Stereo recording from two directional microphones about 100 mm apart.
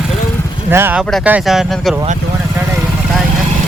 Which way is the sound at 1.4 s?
Centre (ahead or behind).